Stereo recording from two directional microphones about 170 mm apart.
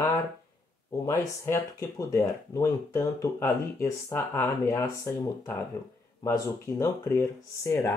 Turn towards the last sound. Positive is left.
turn(degrees=15)  # may be behind; listen again after turning